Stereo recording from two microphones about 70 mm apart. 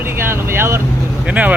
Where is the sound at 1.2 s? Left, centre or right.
Centre.